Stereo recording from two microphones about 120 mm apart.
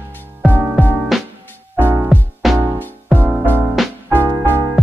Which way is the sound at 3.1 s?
15° right (ahead or behind).